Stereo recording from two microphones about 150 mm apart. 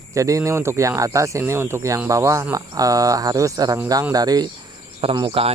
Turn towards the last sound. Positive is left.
turn(degrees=-35)  # may be behind; listen again after turning